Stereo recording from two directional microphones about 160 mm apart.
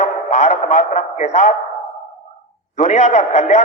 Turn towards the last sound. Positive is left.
turn(degrees=45)  # may be behind; listen again after turning